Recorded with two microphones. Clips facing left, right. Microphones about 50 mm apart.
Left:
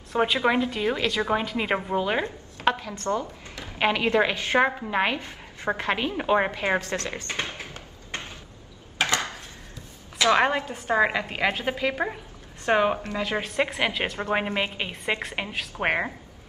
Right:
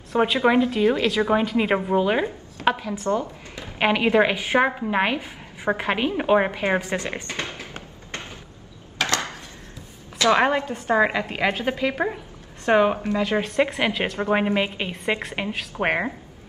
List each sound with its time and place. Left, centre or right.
0.1 s a woman's voice: centre
3.1 s a woman's voice: centre
9.0 s a sound: left
10.3 s a woman's voice: centre